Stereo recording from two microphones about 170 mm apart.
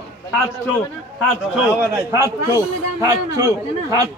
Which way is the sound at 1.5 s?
15° right (ahead or behind).